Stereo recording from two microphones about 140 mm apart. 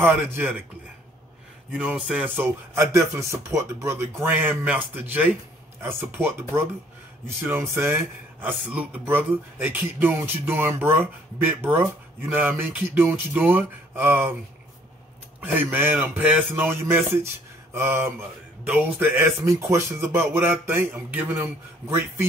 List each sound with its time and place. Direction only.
0.0 s speech: 15° right (ahead or behind)
1.7 s speech: 10° right (ahead or behind)
4.3 s speech: 10° right (ahead or behind)
15.4 s speech: 15° right (ahead or behind)
17.7 s mantra: 20° right (ahead or behind)
18.6 s speech: 15° right (ahead or behind)